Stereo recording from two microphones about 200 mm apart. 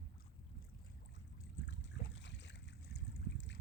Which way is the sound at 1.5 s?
65° left (ahead or behind).